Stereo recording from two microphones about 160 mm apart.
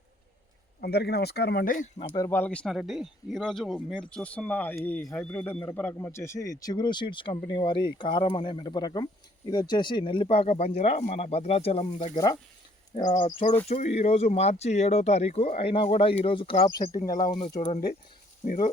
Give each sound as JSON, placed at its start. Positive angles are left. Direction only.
{"t": 0.8, "sound": "speech", "side_deg": 90}
{"t": 2.1, "sound": "speech", "side_deg": 15}
{"t": 2.6, "sound": "speech", "side_deg": 0}
{"t": 4.0, "sound": "a man's voice", "side_deg": 5}
{"t": 12.1, "sound": "a man's voice", "side_deg": 25}
{"t": 13.2, "sound": "a man's voice", "side_deg": 45}
{"t": 18.4, "sound": "speech", "side_deg": 50}